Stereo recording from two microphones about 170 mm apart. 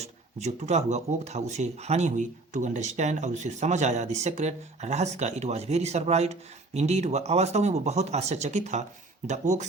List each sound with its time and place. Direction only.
0.0 s speech: 40° right (ahead or behind)